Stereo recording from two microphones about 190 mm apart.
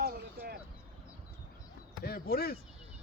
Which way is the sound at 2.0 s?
50° left (ahead or behind).